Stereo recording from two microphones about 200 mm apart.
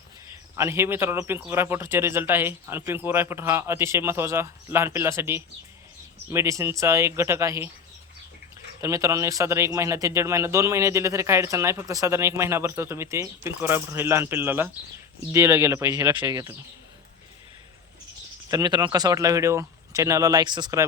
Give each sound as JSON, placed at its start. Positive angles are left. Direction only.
{"t": 0.5, "sound": "speech", "side_deg": -15}
{"t": 8.8, "sound": "speech", "side_deg": -15}
{"t": 18.5, "sound": "speech", "side_deg": -20}